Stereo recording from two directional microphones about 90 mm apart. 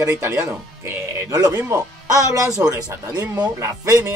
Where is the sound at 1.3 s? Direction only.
40° right (ahead or behind).